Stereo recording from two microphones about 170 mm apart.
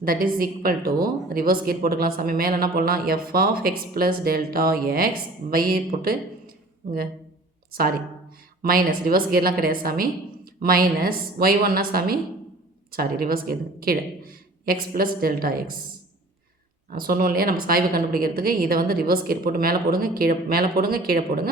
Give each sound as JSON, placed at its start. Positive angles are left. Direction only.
{"t": 0.0, "sound": "a woman's voice", "side_deg": -60}
{"t": 16.9, "sound": "a woman's voice", "side_deg": -60}